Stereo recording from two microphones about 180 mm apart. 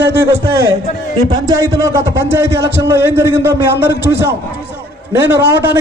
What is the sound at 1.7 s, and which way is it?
A man's voice, 15° right (ahead or behind).